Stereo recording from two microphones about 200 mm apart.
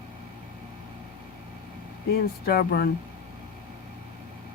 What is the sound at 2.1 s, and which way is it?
Speech, 55° left (ahead or behind).